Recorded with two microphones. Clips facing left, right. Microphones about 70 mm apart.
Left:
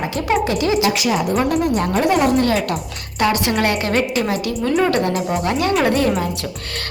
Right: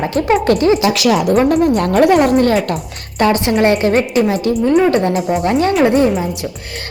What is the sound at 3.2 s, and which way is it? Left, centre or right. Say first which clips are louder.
A woman's voice: right 5 dB; right.